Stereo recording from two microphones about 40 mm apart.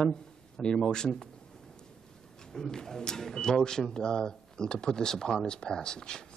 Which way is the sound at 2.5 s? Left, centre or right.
Centre.